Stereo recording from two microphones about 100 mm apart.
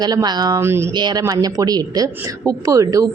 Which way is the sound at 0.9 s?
45° right (ahead or behind).